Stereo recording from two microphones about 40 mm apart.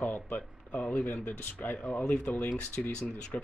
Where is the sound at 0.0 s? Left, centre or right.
Left.